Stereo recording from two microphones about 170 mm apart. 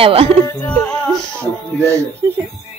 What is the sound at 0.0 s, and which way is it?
Speech, 35° right (ahead or behind).